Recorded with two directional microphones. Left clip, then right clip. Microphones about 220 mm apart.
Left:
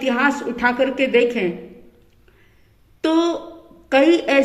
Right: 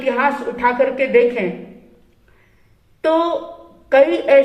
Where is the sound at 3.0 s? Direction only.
50° left (ahead or behind).